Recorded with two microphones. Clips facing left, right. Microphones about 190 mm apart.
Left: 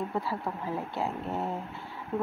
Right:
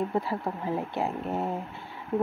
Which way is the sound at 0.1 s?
20° right (ahead or behind).